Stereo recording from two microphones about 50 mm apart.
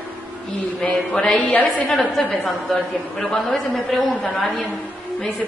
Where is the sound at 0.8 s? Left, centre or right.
Centre.